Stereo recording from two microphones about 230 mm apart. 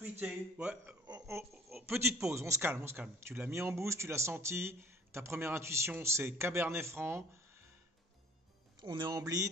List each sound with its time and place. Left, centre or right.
0.2 s speech: centre
1.0 s a sound: centre
1.8 s a man's voice: centre
8.8 s a man's voice: centre